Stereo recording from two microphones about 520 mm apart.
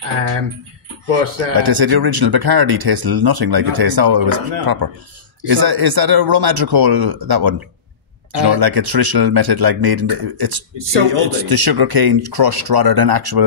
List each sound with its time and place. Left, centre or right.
1.5 s speech: right